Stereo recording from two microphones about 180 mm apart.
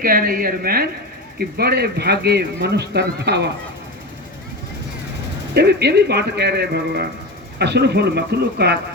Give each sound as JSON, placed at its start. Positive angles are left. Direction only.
{"t": 0.0, "sound": "speech", "side_deg": -55}
{"t": 5.5, "sound": "speech", "side_deg": -65}